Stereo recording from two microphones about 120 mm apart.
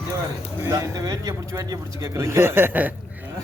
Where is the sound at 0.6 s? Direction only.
30° right (ahead or behind).